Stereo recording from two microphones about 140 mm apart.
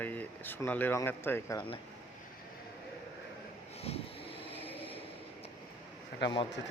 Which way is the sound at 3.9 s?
45° left (ahead or behind).